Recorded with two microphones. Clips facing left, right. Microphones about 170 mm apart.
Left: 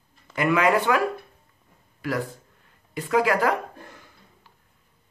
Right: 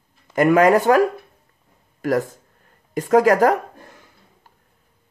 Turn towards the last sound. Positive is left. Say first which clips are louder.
# right 7 dB
turn(degrees=-45)  # may be behind; listen again after turning